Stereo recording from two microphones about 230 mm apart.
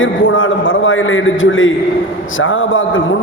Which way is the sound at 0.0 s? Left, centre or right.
Left.